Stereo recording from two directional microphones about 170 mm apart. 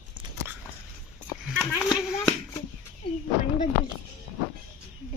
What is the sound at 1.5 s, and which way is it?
Clapping, centre (ahead or behind).